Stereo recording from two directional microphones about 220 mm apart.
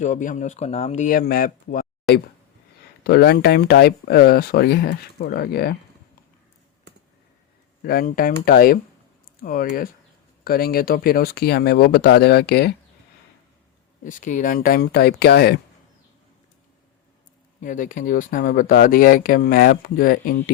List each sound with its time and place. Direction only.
0.0 s speech: 35° left (ahead or behind)
3.0 s speech: 45° left (ahead or behind)
7.8 s speech: 45° left (ahead or behind)
14.0 s speech: 35° left (ahead or behind)
17.6 s speech: 35° left (ahead or behind)